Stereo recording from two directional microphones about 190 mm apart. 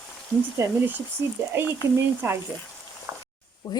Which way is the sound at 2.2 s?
10° right (ahead or behind).